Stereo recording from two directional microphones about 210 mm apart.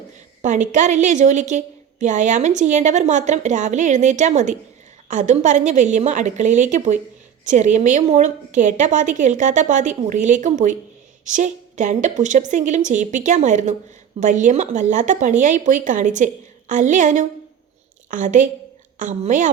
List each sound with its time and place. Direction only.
0.4 s a woman's voice: 35° right (ahead or behind)